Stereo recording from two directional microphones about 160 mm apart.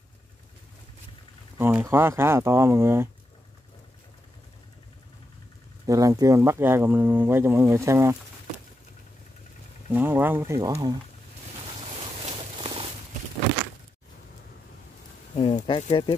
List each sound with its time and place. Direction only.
1.6 s speech: 10° right (ahead or behind)
5.9 s speech: 20° right (ahead or behind)
9.9 s speech: 10° right (ahead or behind)
12.3 s a sound: 40° right (ahead or behind)
15.3 s speech: 30° left (ahead or behind)